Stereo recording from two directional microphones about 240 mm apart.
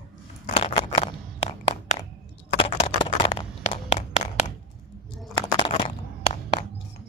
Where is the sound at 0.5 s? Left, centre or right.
Left.